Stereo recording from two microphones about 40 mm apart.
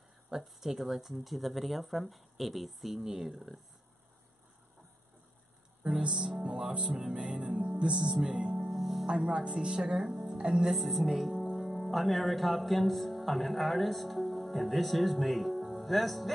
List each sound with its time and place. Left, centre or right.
0.3 s speech: centre
5.9 s music: centre
7.5 s music: right
8.7 s music: centre
9.0 s speech: right
10.8 s speech: centre
11.5 s music: centre
11.9 s speech: centre